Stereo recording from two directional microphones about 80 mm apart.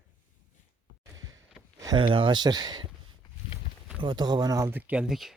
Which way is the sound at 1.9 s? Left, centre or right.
Right.